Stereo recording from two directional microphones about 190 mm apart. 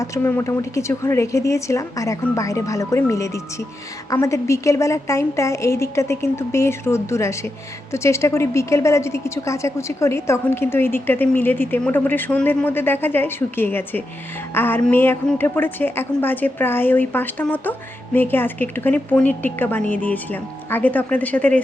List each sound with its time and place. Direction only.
0.0 s a woman's voice: 15° left (ahead or behind)